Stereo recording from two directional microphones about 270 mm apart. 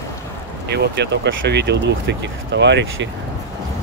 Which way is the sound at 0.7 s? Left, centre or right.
Right.